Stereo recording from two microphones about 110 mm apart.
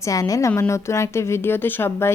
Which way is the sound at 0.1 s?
30° left (ahead or behind).